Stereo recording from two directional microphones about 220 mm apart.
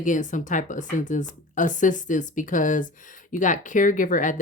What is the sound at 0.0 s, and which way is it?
Speech, 35° left (ahead or behind).